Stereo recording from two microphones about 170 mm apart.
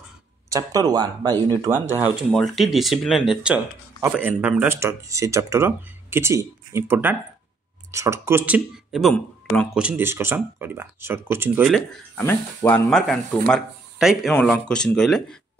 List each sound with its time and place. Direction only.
0.5 s speech: 20° right (ahead or behind)
2.1 s speech: centre (ahead or behind)
9.1 s speech: 10° left (ahead or behind)
9.8 s speech: 10° right (ahead or behind)
12.2 s speech: 10° left (ahead or behind)